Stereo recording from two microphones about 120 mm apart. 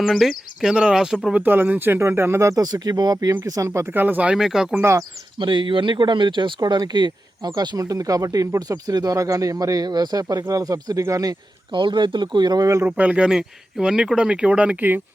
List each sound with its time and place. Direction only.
0.0 s speech: centre (ahead or behind)
1.4 s speech: 15° right (ahead or behind)
3.7 s speech: 15° right (ahead or behind)
4.8 s speech: 20° right (ahead or behind)
5.4 s speech: 45° right (ahead or behind)
12.8 s speech: 10° right (ahead or behind)